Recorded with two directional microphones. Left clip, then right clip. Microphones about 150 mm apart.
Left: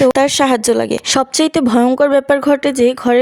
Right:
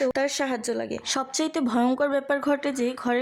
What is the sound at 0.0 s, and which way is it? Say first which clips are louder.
A woman's voice: left 13 dB; 50° left (ahead or behind).